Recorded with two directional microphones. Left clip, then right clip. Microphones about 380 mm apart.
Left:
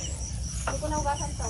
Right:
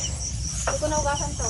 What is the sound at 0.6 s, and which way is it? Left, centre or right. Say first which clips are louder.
Cricket: right 5 dB; right.